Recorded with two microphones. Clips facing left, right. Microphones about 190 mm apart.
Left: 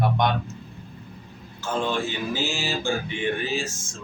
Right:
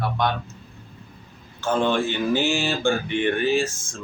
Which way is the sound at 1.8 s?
60° right (ahead or behind).